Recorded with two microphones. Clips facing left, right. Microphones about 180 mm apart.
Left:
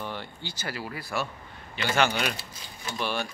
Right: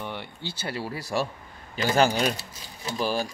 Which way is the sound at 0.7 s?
30° right (ahead or behind).